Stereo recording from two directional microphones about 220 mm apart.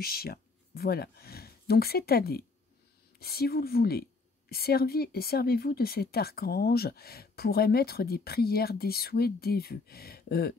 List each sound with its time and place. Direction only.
0.0 s speech: 45° left (ahead or behind)